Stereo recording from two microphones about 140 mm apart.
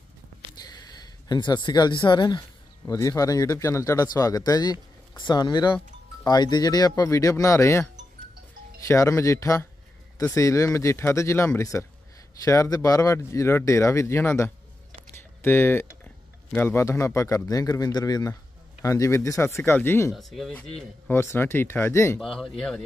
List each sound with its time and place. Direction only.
0.6 s a sound: 30° left (ahead or behind)
2.9 s speech: 25° left (ahead or behind)
20.1 s speech: centre (ahead or behind)
21.1 s speech: 15° left (ahead or behind)
22.2 s speech: centre (ahead or behind)